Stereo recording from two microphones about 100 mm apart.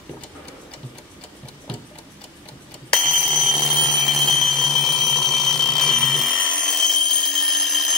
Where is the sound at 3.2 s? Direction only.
65° left (ahead or behind).